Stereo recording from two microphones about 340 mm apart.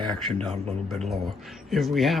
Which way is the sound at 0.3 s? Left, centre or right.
Centre.